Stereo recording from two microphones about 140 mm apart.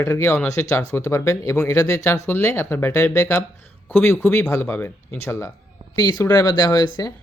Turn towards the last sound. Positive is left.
turn(degrees=30)  # may be behind; listen again after turning